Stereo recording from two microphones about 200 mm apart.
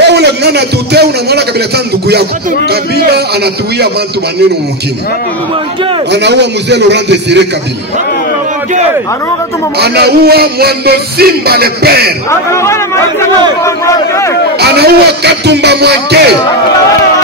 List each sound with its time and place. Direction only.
0.0 s a man's voice: 55° right (ahead or behind)
2.7 s music: 55° right (ahead or behind)
6.1 s a man's voice: 60° right (ahead or behind)
9.8 s music: 55° right (ahead or behind)
12.3 s speech: 15° left (ahead or behind)
13.7 s crowd: 15° left (ahead or behind)
14.6 s a man's voice: 55° right (ahead or behind)